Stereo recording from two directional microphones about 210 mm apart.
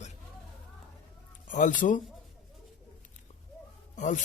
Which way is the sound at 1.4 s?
40° left (ahead or behind).